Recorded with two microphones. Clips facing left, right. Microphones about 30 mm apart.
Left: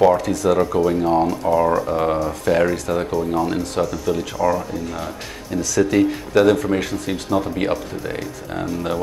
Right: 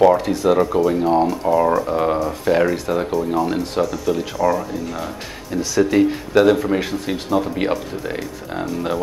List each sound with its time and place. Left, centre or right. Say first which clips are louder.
0.2 s speech: right 1 dB; right
0.5 s speech: right 1 dB; centre